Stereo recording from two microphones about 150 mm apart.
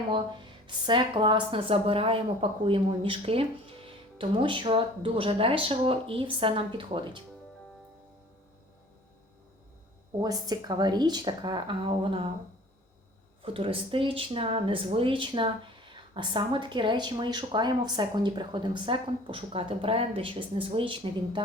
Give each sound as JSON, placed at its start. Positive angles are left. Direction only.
{"t": 0.9, "sound": "a woman's voice", "side_deg": -35}
{"t": 10.2, "sound": "speech", "side_deg": -25}
{"t": 13.4, "sound": "a woman's voice", "side_deg": -35}